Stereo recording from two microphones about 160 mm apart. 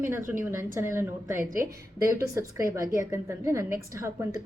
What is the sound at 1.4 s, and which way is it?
Speech, 60° right (ahead or behind).